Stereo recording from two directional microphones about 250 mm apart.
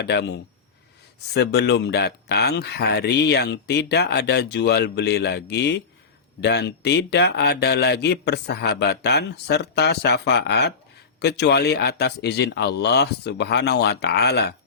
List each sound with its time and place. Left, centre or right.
0.0 s speech: left